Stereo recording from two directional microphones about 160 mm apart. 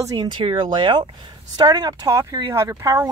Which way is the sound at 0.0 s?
25° right (ahead or behind).